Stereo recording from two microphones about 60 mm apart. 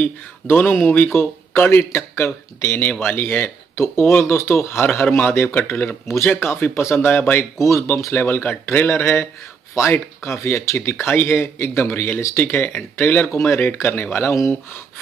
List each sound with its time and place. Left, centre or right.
0.0 s a man's voice: left
7.1 s speech: left
7.6 s a man's voice: left